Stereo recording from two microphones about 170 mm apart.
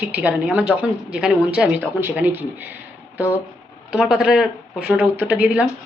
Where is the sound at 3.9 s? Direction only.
5° right (ahead or behind).